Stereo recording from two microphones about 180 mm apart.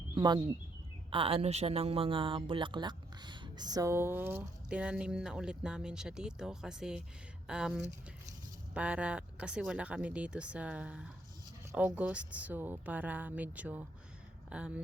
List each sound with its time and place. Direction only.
0.1 s a woman's voice: 25° right (ahead or behind); by 14.8 s 5° right (ahead or behind)